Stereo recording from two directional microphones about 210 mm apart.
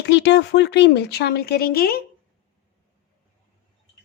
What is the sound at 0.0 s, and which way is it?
Speech, 55° left (ahead or behind).